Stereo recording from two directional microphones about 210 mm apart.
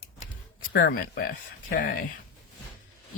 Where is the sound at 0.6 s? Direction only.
50° left (ahead or behind).